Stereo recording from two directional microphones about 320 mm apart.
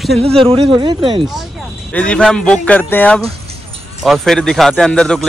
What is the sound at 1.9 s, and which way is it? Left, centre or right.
A man's voice, centre.